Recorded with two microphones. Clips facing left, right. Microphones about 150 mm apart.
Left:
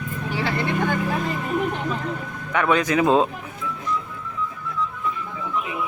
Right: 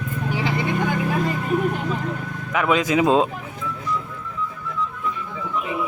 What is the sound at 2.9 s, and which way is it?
Speech, 20° right (ahead or behind).